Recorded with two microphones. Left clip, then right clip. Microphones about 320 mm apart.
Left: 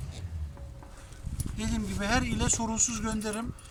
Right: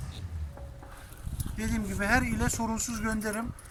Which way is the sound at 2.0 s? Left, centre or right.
Centre.